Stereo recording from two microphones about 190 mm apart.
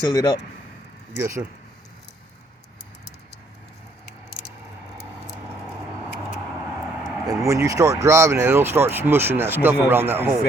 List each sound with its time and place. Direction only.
0.1 s speech: 20° left (ahead or behind)
1.1 s speech: 15° right (ahead or behind)
7.3 s speech: 15° right (ahead or behind)